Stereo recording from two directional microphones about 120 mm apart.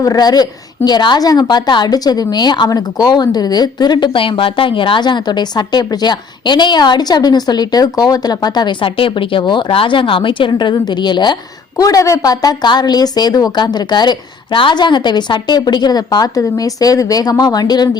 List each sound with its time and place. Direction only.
0.0 s speech: 35° left (ahead or behind)